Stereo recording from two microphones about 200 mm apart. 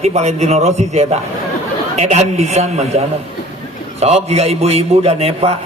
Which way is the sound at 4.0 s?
30° right (ahead or behind).